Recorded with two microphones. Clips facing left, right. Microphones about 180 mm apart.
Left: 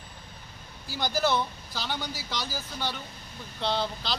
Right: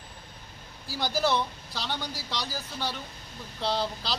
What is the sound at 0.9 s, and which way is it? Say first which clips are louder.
Speech: even; centre (ahead or behind).